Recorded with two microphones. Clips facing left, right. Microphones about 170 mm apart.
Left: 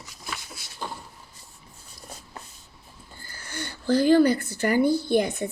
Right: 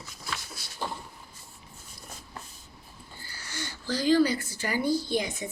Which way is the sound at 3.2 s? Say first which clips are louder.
Left 3 dB; 50° left (ahead or behind).